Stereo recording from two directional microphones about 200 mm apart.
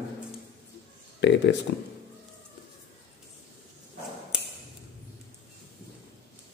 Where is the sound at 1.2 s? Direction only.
60° left (ahead or behind).